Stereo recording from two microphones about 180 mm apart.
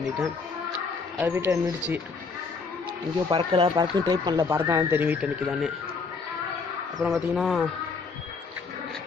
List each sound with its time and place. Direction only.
1.3 s speech: 15° right (ahead or behind)
3.3 s speech: 30° right (ahead or behind); by 5.7 s 5° right (ahead or behind)
7.0 s speech: centre (ahead or behind)